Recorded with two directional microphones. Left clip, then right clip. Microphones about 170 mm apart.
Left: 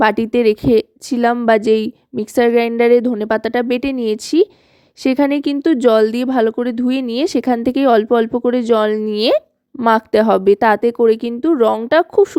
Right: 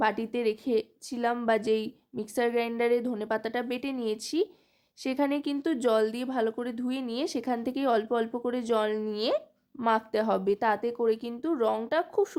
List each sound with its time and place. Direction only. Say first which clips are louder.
0.0 s speech: left 14 dB; 50° left (ahead or behind)